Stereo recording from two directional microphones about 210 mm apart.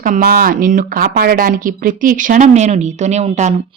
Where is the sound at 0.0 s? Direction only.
40° right (ahead or behind).